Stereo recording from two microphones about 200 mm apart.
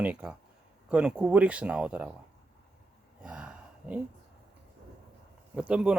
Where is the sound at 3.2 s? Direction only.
5° right (ahead or behind).